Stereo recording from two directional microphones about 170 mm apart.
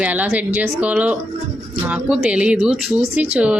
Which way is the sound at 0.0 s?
10° right (ahead or behind).